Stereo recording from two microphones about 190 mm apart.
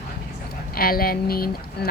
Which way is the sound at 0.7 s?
50° left (ahead or behind).